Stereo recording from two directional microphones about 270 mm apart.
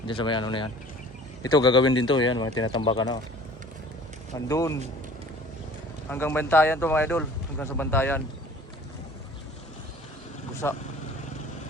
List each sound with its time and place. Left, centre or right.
0.1 s speech: centre
4.4 s speech: centre
6.1 s speech: centre
10.6 s speech: centre